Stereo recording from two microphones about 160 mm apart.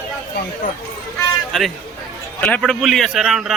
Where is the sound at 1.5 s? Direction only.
Centre (ahead or behind).